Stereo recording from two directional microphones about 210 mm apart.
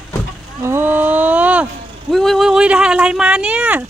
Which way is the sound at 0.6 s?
10° right (ahead or behind).